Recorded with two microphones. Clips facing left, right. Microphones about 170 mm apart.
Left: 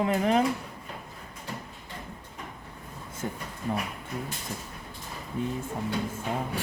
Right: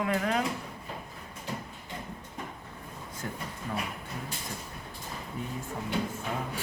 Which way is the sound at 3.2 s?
25° left (ahead or behind).